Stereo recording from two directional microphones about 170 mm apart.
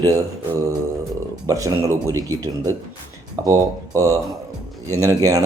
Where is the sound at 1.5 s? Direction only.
20° right (ahead or behind).